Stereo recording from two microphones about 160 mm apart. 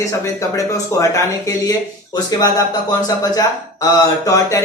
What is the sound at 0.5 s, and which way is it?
Speech, 20° left (ahead or behind).